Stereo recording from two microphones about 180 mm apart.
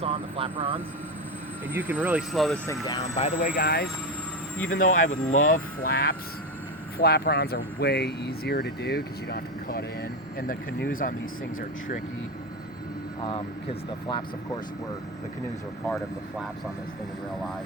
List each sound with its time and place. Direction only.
0.0 s vehicle: 30° right (ahead or behind)
1.7 s speech: 10° right (ahead or behind)
2.3 s speech: centre (ahead or behind)
3.2 s speech: 40° left (ahead or behind); by 3.8 s 60° left (ahead or behind)
4.8 s speech: 45° left (ahead or behind)
14.1 s speech: 25° left (ahead or behind)